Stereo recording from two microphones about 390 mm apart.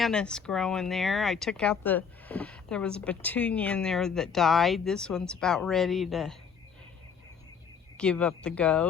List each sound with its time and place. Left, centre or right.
0.0 s speech: centre
7.9 s speech: centre